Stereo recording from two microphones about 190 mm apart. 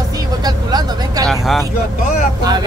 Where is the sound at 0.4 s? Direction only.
20° right (ahead or behind).